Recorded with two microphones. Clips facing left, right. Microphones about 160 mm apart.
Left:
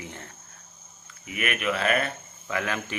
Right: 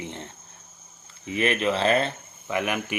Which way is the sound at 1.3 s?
30° right (ahead or behind).